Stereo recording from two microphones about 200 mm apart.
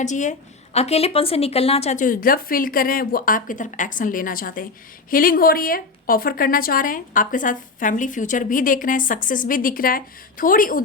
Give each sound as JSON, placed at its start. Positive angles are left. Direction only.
{"t": 0.0, "sound": "a woman's voice", "side_deg": 35}